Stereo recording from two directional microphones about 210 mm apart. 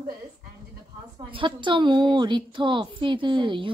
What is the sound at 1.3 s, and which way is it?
Speech, 25° right (ahead or behind).